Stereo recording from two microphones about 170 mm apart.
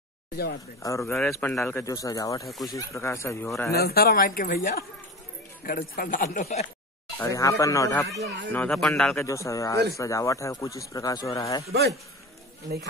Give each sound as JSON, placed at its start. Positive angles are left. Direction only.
{"t": 0.8, "sound": "speech", "side_deg": 15}
{"t": 2.4, "sound": "speech", "side_deg": 0}
{"t": 2.7, "sound": "speech", "side_deg": 15}
{"t": 3.7, "sound": "speech", "side_deg": 65}
{"t": 7.2, "sound": "speech", "side_deg": 20}
{"t": 9.2, "sound": "speech", "side_deg": 20}